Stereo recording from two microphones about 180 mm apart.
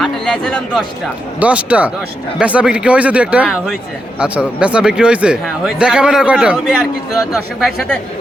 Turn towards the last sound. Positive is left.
turn(degrees=0)  # may be behind; listen again after turning